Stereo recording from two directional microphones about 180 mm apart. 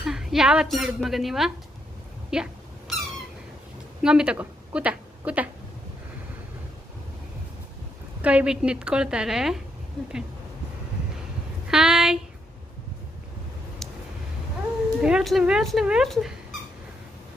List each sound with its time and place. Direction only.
0.0 s speech: centre (ahead or behind)
2.3 s dog: 5° right (ahead or behind)
4.0 s a woman's voice: 5° right (ahead or behind)
8.2 s a woman's voice: 5° right (ahead or behind)
11.7 s a sound: 5° right (ahead or behind)
15.0 s a woman's voice: centre (ahead or behind)